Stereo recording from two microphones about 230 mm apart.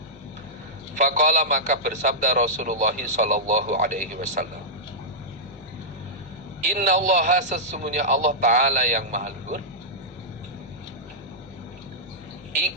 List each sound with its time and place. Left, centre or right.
1.0 s a man's voice: right
6.7 s a man's voice: right